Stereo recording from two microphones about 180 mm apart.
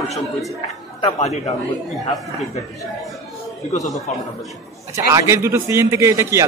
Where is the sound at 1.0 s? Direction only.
35° left (ahead or behind).